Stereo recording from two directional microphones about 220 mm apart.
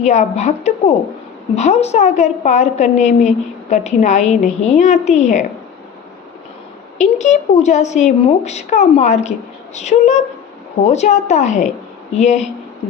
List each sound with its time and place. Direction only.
0.0 s a woman's voice: 30° left (ahead or behind)
7.0 s a woman's voice: 30° left (ahead or behind)